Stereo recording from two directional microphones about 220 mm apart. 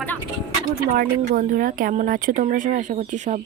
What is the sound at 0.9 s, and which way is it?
Speech, 35° right (ahead or behind).